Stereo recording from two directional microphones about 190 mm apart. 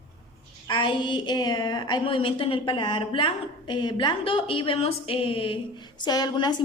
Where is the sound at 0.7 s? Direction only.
25° left (ahead or behind).